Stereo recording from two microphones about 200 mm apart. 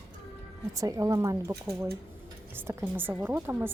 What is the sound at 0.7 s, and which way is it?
Speech, 15° right (ahead or behind).